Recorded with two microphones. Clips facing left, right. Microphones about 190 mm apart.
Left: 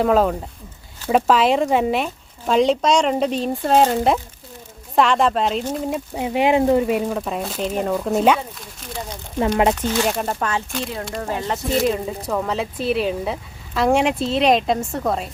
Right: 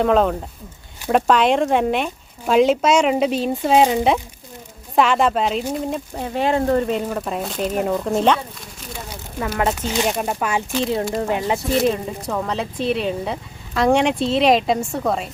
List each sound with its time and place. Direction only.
0.0 s speech: 5° left (ahead or behind)
6.1 s speech: 15° left (ahead or behind)
9.7 s speech: 10° right (ahead or behind)
11.9 s speech: centre (ahead or behind)